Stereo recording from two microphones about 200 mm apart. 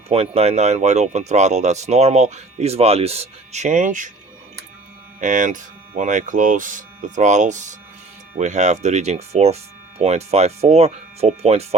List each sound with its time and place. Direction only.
0.1 s speech: 30° right (ahead or behind)
5.2 s speech: 40° right (ahead or behind)